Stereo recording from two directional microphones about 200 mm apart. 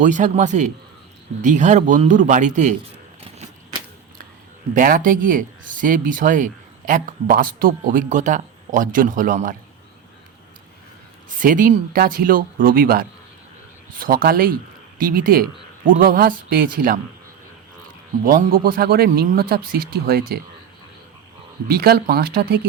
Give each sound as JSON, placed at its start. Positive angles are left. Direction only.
{"t": 0.0, "sound": "speech", "side_deg": -40}
{"t": 4.7, "sound": "speech", "side_deg": -40}
{"t": 11.3, "sound": "speech", "side_deg": -40}
{"t": 18.3, "sound": "speech", "side_deg": -45}
{"t": 21.7, "sound": "speech", "side_deg": -50}